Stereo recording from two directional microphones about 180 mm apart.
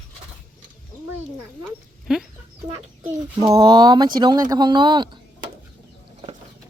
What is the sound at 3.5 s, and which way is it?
Speech, 25° right (ahead or behind).